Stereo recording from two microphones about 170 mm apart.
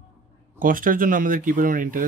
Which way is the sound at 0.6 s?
55° right (ahead or behind).